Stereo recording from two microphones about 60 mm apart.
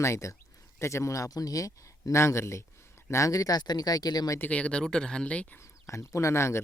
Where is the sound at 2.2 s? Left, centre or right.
Left.